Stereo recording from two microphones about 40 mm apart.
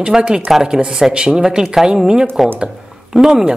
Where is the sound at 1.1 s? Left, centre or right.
Right.